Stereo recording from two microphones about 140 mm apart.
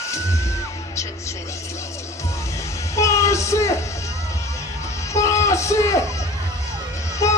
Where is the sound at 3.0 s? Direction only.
20° left (ahead or behind).